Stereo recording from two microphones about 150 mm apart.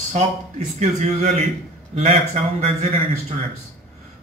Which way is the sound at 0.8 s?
50° right (ahead or behind).